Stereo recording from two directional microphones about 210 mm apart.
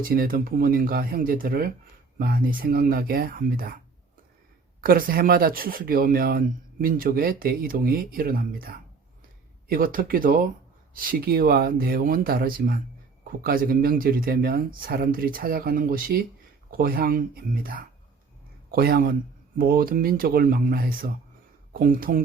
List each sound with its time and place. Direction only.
0.0 s speech: 45° right (ahead or behind)
4.8 s speech: 45° right (ahead or behind)